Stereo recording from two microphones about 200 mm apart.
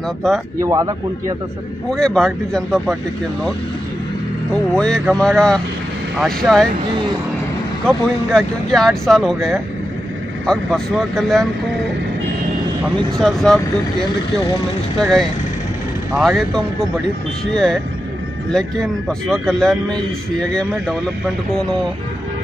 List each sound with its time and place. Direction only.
0.2 s a man's voice: centre (ahead or behind)
0.6 s speech: 15° right (ahead or behind)
1.9 s a man's voice: 5° left (ahead or behind)
4.7 s a man's voice: 5° left (ahead or behind)
7.8 s a man's voice: 5° left (ahead or behind)
12.8 s a man's voice: centre (ahead or behind)
15.0 s a man's voice: centre (ahead or behind)
18.5 s a man's voice: centre (ahead or behind)